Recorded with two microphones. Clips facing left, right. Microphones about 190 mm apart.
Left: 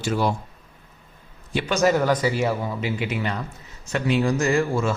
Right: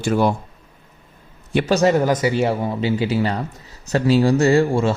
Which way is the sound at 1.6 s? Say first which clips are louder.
Right 3 dB; 35° right (ahead or behind).